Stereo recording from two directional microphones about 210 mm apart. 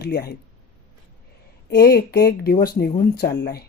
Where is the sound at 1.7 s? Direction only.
50° left (ahead or behind).